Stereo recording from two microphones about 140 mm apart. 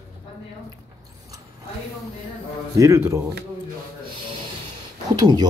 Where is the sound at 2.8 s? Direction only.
20° right (ahead or behind).